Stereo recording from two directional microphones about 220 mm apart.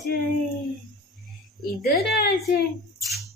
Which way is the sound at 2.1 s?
45° left (ahead or behind).